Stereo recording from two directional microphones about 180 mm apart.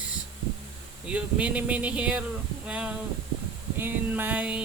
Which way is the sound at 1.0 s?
5° right (ahead or behind).